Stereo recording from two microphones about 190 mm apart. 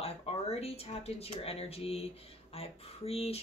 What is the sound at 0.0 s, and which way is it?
Speech, 30° left (ahead or behind).